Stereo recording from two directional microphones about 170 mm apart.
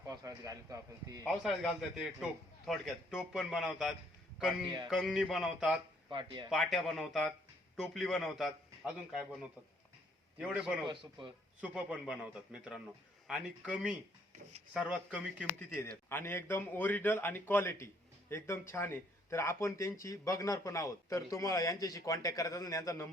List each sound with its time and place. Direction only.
0.0 s a man's voice: 20° right (ahead or behind)
1.3 s a man's voice: centre (ahead or behind)
6.1 s a man's voice: 30° right (ahead or behind)
6.5 s a man's voice: centre (ahead or behind)
10.8 s a man's voice: 30° right (ahead or behind)
11.6 s a man's voice: 5° right (ahead or behind)
15.9 s a man's voice: 15° left (ahead or behind)